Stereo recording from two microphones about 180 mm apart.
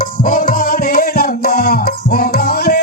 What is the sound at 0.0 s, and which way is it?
Music, 50° left (ahead or behind).